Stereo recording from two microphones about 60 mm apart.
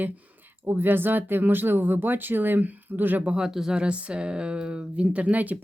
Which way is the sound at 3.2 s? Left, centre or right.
Centre.